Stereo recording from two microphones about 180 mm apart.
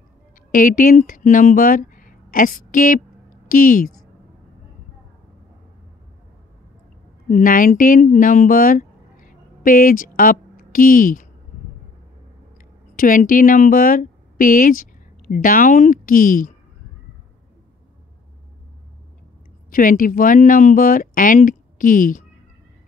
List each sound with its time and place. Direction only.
0.5 s speech: 50° left (ahead or behind)
7.2 s speech: 50° left (ahead or behind)
12.9 s speech: 50° left (ahead or behind)
19.7 s speech: 50° left (ahead or behind)